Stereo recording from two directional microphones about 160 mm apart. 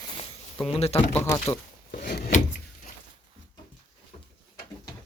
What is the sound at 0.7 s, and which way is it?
Speech, 40° left (ahead or behind).